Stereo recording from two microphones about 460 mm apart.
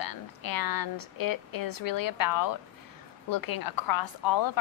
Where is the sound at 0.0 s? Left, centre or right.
Left.